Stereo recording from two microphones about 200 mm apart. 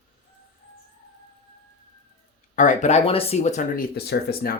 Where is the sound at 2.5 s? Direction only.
40° left (ahead or behind).